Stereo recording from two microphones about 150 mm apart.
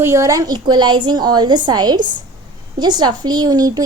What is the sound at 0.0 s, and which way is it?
A woman's voice, 20° right (ahead or behind).